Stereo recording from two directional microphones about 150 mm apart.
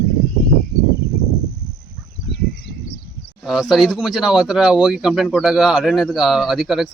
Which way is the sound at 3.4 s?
5° right (ahead or behind).